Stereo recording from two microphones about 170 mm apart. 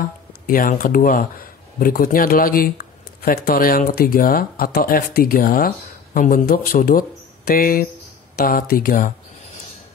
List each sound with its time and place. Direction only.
0.5 s speech: 55° left (ahead or behind)